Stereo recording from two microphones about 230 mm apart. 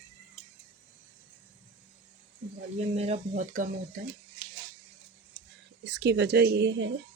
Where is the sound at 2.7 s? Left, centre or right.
Right.